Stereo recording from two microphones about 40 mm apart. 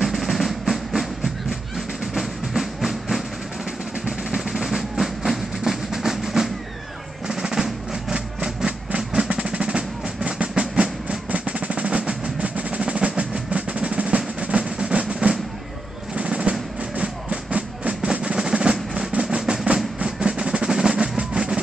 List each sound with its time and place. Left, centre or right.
0.0 s music: centre
2.1 s music: centre
4.6 s train: centre
7.2 s music: centre
11.3 s percussion: right
16.2 s music: right